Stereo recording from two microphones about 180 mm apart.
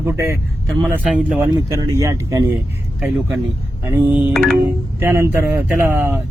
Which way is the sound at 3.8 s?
15° right (ahead or behind).